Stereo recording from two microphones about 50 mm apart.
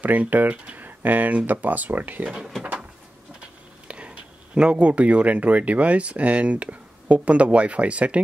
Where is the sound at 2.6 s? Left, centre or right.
Right.